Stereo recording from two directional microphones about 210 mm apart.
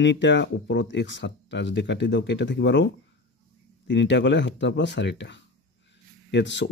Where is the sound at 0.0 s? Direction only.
55° left (ahead or behind).